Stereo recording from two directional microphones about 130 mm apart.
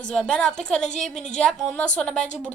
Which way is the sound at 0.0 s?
5° left (ahead or behind).